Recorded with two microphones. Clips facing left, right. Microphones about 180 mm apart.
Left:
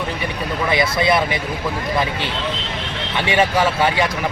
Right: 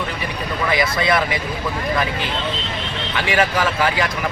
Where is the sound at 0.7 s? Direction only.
25° left (ahead or behind).